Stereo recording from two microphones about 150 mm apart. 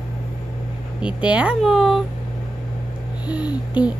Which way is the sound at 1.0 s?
5° right (ahead or behind).